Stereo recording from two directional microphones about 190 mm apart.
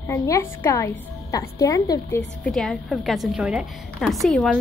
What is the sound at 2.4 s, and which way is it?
A woman's voice, centre (ahead or behind).